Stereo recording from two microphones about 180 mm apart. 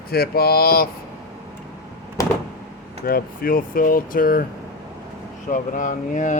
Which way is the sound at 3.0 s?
55° left (ahead or behind).